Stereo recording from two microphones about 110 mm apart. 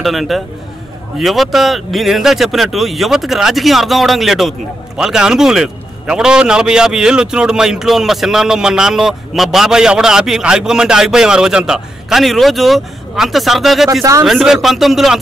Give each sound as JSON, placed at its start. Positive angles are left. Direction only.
{"t": 0.0, "sound": "speech", "side_deg": 0}